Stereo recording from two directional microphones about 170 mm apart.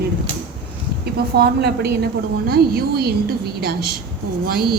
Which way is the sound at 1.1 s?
70° right (ahead or behind).